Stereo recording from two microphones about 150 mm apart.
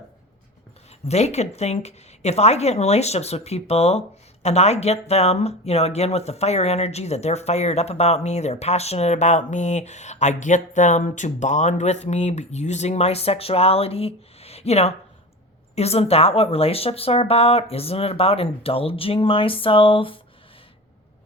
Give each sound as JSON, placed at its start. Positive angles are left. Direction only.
{"t": 1.0, "sound": "speech", "side_deg": 45}